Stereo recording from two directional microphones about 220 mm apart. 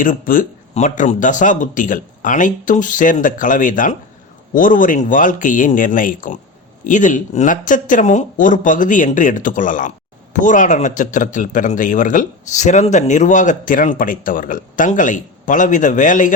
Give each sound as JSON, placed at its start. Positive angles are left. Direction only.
{"t": 0.0, "sound": "speech", "side_deg": 35}